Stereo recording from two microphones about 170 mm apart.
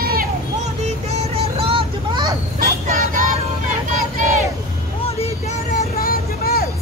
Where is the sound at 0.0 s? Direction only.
60° right (ahead or behind).